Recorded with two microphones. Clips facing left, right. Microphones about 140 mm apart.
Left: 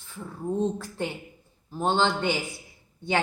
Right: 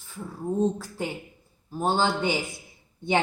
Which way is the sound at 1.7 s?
10° right (ahead or behind).